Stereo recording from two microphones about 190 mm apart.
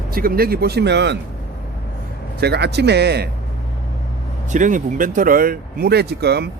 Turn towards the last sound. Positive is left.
turn(degrees=-60)  # may be behind; listen again after turning